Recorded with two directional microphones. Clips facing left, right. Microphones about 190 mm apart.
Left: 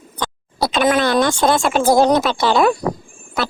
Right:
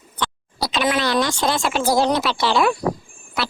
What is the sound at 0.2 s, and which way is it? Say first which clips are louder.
Speech: left 4 dB; 50° left (ahead or behind).